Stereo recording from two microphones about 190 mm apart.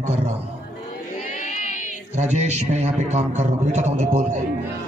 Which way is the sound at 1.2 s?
40° left (ahead or behind).